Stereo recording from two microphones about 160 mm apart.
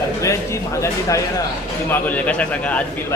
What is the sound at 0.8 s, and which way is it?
Speech, 20° left (ahead or behind).